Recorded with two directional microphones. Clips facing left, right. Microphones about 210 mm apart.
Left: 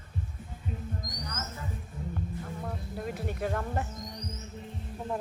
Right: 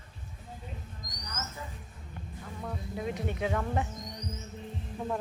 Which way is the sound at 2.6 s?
Centre (ahead or behind).